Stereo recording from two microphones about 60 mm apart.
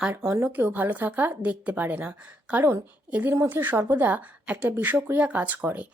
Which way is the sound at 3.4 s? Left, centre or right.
Right.